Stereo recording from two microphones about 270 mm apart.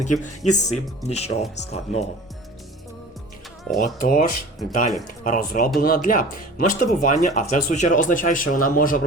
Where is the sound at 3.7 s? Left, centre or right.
Left.